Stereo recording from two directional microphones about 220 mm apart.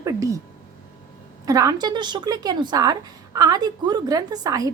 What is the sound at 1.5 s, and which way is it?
A woman's voice, 15° right (ahead or behind).